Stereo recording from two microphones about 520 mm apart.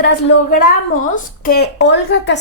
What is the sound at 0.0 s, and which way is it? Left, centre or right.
A woman's voice, centre.